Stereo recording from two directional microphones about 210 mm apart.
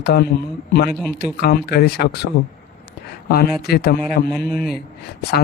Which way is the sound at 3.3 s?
45° left (ahead or behind).